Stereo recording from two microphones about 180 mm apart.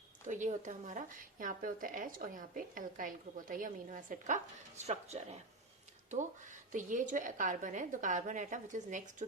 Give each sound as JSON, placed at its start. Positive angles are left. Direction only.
{"t": 0.3, "sound": "speech", "side_deg": -45}
{"t": 6.7, "sound": "speech", "side_deg": -45}